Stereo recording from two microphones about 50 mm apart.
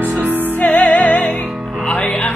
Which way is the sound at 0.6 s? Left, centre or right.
Left.